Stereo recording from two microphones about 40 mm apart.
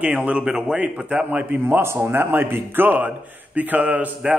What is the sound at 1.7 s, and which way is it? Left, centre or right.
A man's voice, right.